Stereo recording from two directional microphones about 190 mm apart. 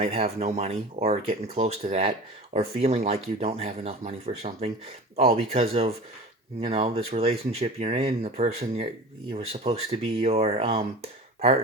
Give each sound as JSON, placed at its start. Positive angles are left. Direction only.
{"t": 0.0, "sound": "speech", "side_deg": -35}
{"t": 9.9, "sound": "speech", "side_deg": -35}